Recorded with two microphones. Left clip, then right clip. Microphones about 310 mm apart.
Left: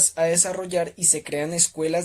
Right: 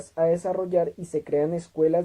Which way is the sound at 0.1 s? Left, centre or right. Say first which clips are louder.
Left 1 dB; left.